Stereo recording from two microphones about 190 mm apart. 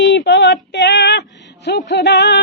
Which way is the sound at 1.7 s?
65° left (ahead or behind).